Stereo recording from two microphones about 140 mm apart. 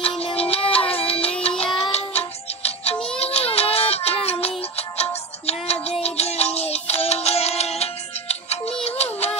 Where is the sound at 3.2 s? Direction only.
45° left (ahead or behind).